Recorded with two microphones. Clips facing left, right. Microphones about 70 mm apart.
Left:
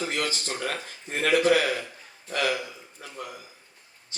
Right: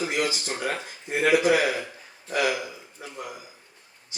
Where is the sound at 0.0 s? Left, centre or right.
Centre.